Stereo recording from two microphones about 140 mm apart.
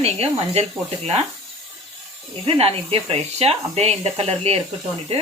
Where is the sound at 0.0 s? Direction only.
45° right (ahead or behind).